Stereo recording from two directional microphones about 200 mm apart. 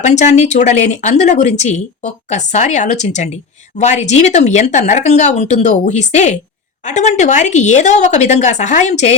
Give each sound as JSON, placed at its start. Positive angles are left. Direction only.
{"t": 0.0, "sound": "speech", "side_deg": 35}